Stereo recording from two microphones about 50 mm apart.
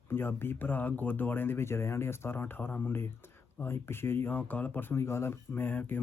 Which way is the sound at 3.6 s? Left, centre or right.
Left.